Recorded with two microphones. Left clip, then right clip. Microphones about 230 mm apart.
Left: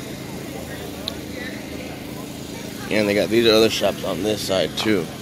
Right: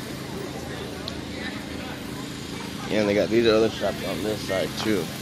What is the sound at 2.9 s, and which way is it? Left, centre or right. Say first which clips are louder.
Speech: left 3 dB; centre.